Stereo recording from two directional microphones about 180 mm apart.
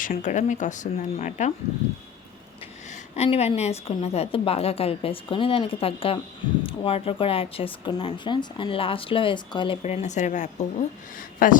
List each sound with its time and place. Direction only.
0.0 s speech: 45° left (ahead or behind)
2.9 s a woman's voice: 35° left (ahead or behind)
9.8 s a woman's voice: 40° left (ahead or behind)